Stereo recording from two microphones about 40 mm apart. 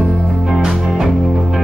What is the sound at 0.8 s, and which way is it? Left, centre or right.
Music, centre.